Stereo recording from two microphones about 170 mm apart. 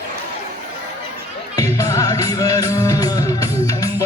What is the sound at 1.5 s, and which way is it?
Music, 20° left (ahead or behind).